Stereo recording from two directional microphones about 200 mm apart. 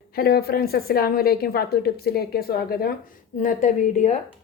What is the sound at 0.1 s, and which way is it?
A woman's voice, 50° left (ahead or behind).